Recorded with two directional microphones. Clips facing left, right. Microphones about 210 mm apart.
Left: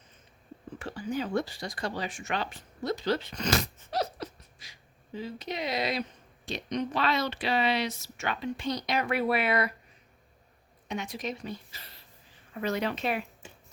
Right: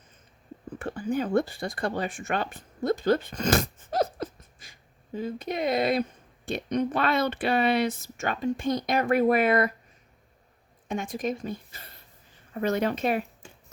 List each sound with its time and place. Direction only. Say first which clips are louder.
0.8 s speech: right 4 dB; 50° right (ahead or behind)
10.8 s a woman's voice: right 5 dB; 50° right (ahead or behind)